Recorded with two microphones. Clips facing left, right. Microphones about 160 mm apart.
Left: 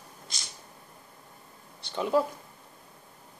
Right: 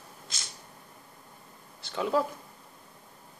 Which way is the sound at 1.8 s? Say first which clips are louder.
Left 2 dB; 5° left (ahead or behind).